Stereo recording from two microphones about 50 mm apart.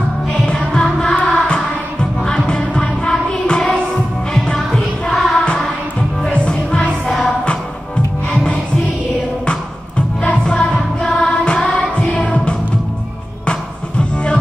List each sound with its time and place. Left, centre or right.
0.3 s music: left
5.1 s music: centre
6.3 s music: left
7.1 s music: centre
9.5 s music: left